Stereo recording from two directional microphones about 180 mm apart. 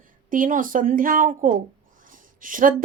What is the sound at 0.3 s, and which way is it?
Speech, 50° right (ahead or behind).